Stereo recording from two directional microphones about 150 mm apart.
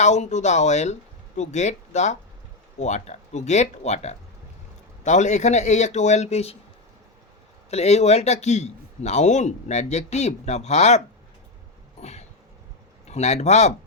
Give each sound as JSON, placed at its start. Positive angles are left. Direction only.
{"t": 0.0, "sound": "a man's voice", "side_deg": 50}
{"t": 7.7, "sound": "a man's voice", "side_deg": 45}
{"t": 11.9, "sound": "a sound", "side_deg": 45}
{"t": 13.1, "sound": "a man's voice", "side_deg": 50}